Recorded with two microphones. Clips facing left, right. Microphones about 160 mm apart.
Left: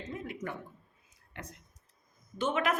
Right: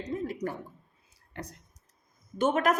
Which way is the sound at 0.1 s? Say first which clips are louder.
Right 7 dB; 35° right (ahead or behind).